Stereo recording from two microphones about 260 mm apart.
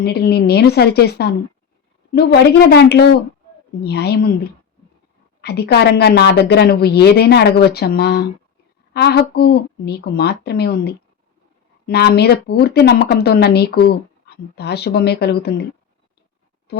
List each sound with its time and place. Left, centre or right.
0.0 s speech: left
5.4 s speech: left